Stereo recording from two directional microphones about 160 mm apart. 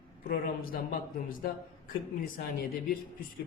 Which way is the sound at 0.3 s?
65° left (ahead or behind).